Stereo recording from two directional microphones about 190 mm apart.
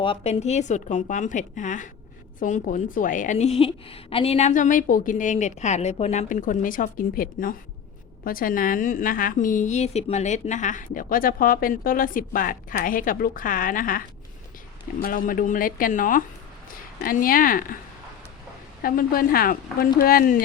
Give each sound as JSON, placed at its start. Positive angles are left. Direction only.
{"t": 0.0, "sound": "a woman's voice", "side_deg": 30}
{"t": 15.0, "sound": "a woman's voice", "side_deg": 45}
{"t": 18.8, "sound": "a woman's voice", "side_deg": 50}